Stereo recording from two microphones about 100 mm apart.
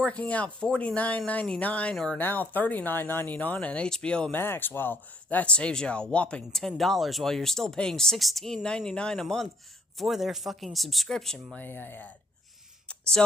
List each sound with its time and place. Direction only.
0.0 s speech: 10° left (ahead or behind)
4.4 s speech: 20° left (ahead or behind); by 11.4 s 5° left (ahead or behind)
11.5 s speech: 20° left (ahead or behind)
12.9 s a sound: 5° left (ahead or behind)